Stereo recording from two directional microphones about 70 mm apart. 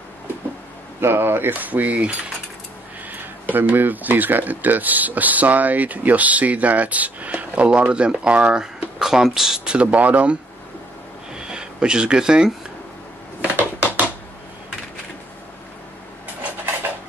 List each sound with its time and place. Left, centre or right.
1.0 s speech: right
3.5 s speech: right
11.3 s speech: centre
13.4 s a sound: right